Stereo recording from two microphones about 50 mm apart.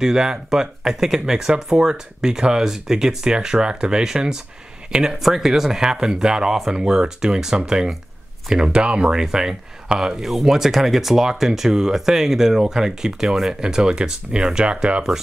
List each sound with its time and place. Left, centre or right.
0.0 s speech: centre